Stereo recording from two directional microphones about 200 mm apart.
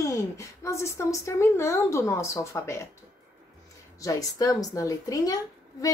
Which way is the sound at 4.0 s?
15° left (ahead or behind).